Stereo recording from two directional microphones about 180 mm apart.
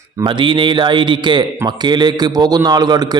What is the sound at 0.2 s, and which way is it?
A man's voice, 25° right (ahead or behind).